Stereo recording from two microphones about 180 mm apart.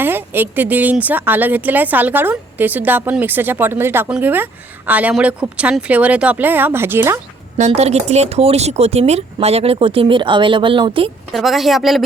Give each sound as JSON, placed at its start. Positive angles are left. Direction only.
{"t": 0.0, "sound": "speech", "side_deg": -10}
{"t": 7.5, "sound": "speech", "side_deg": -35}
{"t": 11.3, "sound": "a woman's voice", "side_deg": 0}